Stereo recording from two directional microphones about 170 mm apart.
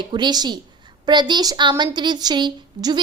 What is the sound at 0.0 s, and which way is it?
A woman's voice, 25° right (ahead or behind).